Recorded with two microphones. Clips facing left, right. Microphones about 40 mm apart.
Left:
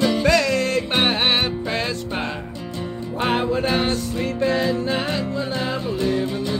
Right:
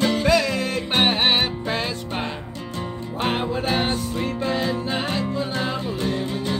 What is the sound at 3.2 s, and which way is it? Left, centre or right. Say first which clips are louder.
Music: left 3 dB; centre.